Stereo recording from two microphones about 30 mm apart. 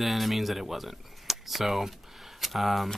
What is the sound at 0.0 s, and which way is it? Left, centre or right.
Speech, centre.